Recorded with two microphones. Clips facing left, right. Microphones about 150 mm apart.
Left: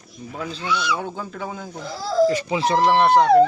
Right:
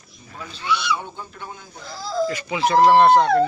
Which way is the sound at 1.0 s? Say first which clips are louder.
Left 6 dB; 90° left.